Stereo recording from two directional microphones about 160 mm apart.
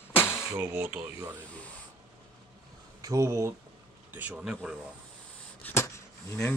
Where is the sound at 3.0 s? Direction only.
20° right (ahead or behind).